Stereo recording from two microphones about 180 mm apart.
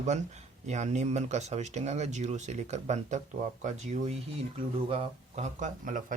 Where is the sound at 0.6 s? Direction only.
40° right (ahead or behind).